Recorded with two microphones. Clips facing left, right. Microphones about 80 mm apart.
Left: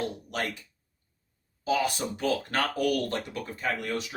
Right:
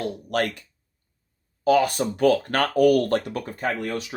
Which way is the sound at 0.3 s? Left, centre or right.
Right.